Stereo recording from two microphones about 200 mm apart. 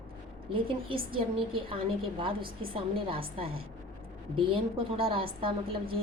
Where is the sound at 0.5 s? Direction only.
25° right (ahead or behind).